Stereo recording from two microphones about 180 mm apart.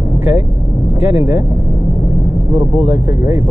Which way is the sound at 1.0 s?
10° right (ahead or behind).